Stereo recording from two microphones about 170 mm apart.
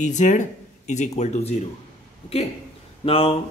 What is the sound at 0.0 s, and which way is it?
Speech, 45° left (ahead or behind).